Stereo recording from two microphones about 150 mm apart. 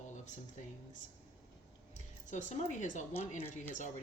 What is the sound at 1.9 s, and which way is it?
A woman's voice, 55° left (ahead or behind).